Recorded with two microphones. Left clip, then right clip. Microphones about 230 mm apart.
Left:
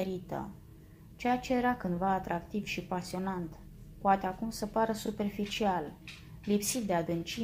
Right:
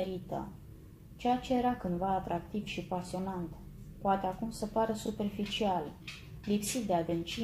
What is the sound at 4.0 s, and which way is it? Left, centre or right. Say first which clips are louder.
Speech: left 3 dB; left.